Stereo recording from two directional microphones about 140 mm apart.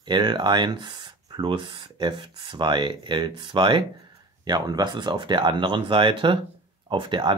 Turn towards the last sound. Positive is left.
turn(degrees=-35)  # may be behind; listen again after turning